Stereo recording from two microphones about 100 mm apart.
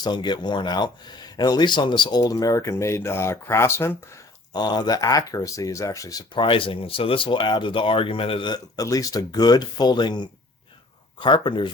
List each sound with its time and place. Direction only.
0.0 s speech: 50° left (ahead or behind); by 4.2 s 25° left (ahead or behind)
4.5 s speech: 45° left (ahead or behind)
6.3 s speech: 55° left (ahead or behind)